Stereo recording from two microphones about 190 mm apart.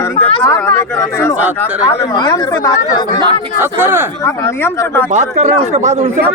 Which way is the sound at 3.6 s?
10° right (ahead or behind).